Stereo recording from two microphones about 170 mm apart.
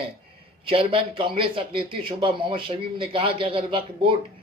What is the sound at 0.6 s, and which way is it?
Speech, 30° right (ahead or behind).